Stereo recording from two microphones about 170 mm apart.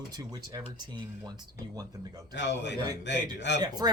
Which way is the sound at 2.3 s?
90° left.